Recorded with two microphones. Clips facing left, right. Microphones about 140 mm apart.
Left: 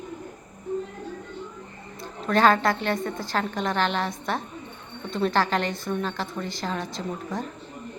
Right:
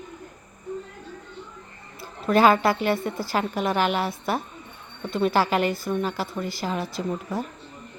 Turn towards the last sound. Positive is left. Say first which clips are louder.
# right 3 dB
turn(degrees=-5)  # may be behind; listen again after turning